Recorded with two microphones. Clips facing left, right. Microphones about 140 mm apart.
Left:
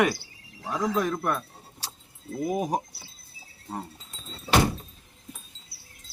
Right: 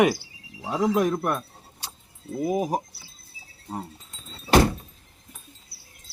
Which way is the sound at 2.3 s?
5° right (ahead or behind).